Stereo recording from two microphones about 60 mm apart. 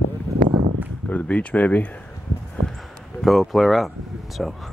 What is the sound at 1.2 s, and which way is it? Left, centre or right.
Speech, left.